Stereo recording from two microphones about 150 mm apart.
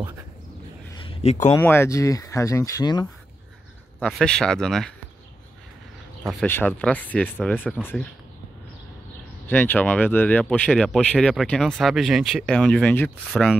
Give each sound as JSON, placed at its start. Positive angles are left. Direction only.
{"t": 0.9, "sound": "a sound", "side_deg": 40}
{"t": 1.6, "sound": "speech", "side_deg": 15}
{"t": 4.0, "sound": "speech", "side_deg": 5}
{"t": 6.4, "sound": "speech", "side_deg": 15}
{"t": 9.5, "sound": "speech", "side_deg": 10}
{"t": 13.3, "sound": "speech", "side_deg": 0}